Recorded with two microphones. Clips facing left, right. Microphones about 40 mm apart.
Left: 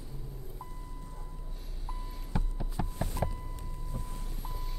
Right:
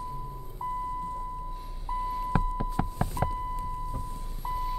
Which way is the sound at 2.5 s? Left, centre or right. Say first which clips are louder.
Right 7 dB; right.